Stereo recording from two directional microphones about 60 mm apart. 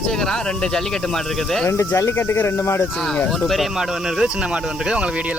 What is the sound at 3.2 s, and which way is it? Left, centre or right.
Speech, centre.